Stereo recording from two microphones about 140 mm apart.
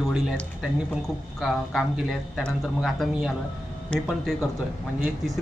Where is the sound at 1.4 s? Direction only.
Centre (ahead or behind).